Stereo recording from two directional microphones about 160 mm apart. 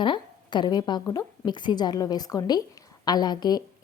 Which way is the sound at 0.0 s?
30° left (ahead or behind).